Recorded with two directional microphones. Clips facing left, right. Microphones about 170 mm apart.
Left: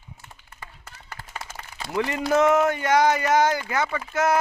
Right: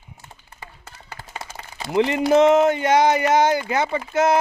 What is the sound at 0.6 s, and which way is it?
A man's voice, 30° right (ahead or behind).